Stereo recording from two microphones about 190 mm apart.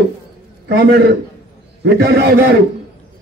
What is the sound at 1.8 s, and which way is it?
Speech, 55° right (ahead or behind).